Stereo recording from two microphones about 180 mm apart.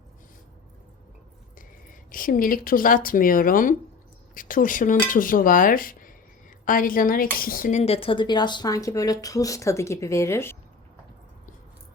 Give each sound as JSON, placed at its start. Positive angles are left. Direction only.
{"t": 1.5, "sound": "speech", "side_deg": 50}